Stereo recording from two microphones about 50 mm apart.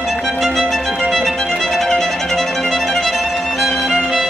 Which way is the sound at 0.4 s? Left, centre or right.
Centre.